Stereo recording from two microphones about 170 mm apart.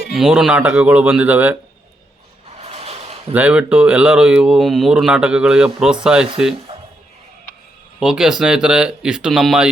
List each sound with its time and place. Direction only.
0.1 s speech: 5° right (ahead or behind)
2.6 s a sound: 35° right (ahead or behind)
3.3 s speech: 5° right (ahead or behind)
6.7 s music: 35° right (ahead or behind)
7.9 s speech: 5° right (ahead or behind)